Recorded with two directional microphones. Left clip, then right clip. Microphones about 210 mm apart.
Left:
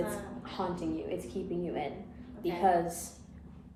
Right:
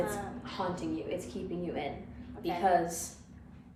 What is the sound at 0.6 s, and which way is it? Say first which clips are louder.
Speech: even; 25° left (ahead or behind).